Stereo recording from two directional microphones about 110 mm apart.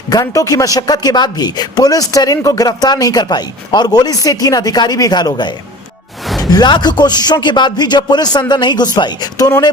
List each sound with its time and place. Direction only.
0.1 s speech: 35° left (ahead or behind)
6.2 s music: centre (ahead or behind)
6.5 s speech: 40° left (ahead or behind)